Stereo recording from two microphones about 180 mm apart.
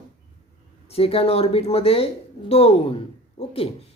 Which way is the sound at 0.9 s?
35° left (ahead or behind).